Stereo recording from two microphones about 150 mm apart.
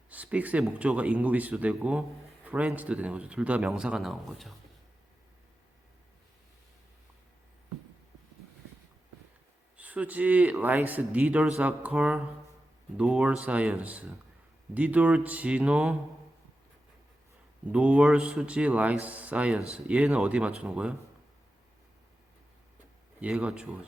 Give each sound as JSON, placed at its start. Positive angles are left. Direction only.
{"t": 0.1, "sound": "speech", "side_deg": -10}
{"t": 9.7, "sound": "speech", "side_deg": -10}
{"t": 17.7, "sound": "speech", "side_deg": -10}
{"t": 23.2, "sound": "speech", "side_deg": -5}